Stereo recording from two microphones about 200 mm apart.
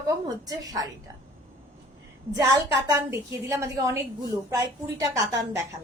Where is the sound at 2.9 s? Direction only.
10° right (ahead or behind).